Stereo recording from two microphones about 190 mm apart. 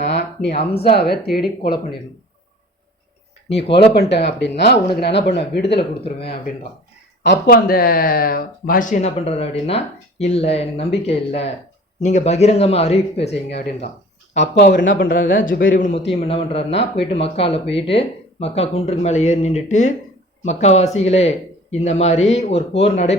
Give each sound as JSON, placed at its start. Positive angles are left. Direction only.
{"t": 0.1, "sound": "a sound", "side_deg": 60}
{"t": 0.5, "sound": "a man's voice", "side_deg": 30}
{"t": 0.9, "sound": "speech", "side_deg": 55}
{"t": 1.7, "sound": "speech", "side_deg": 25}
{"t": 4.1, "sound": "speech", "side_deg": 65}
{"t": 5.6, "sound": "a man's voice", "side_deg": 30}
{"t": 7.3, "sound": "a man's voice", "side_deg": 50}
{"t": 13.3, "sound": "speech", "side_deg": 60}
{"t": 14.9, "sound": "a man's voice", "side_deg": 50}